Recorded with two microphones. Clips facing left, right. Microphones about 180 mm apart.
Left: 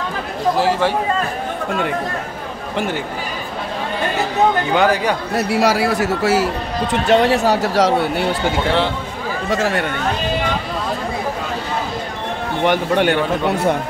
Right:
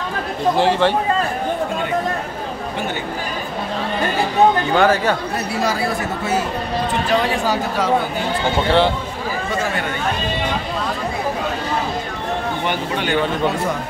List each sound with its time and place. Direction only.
0.6 s speech: 5° left (ahead or behind)
4.7 s speech: 15° left (ahead or behind)
5.5 s speech: 80° left
7.1 s speech: 75° left (ahead or behind)
9.5 s speech: 85° left
12.6 s speech: 65° left (ahead or behind)